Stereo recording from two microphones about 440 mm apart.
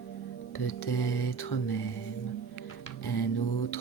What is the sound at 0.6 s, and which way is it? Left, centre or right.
Music, left.